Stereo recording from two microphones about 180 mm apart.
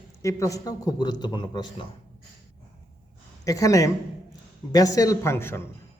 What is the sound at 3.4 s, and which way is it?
A man's voice, 20° left (ahead or behind).